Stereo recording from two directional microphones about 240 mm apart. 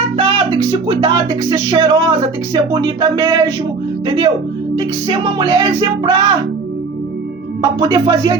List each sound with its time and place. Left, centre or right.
0.2 s music: right
7.6 s music: centre